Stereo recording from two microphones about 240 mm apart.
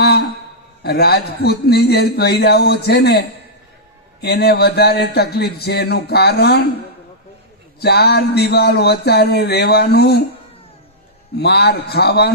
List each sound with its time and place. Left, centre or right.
0.0 s a sound: left
0.8 s a man's voice: left
7.8 s a man's voice: left
11.3 s a man's voice: left